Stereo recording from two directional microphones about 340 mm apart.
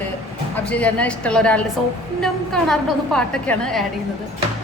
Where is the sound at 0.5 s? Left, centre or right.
Centre.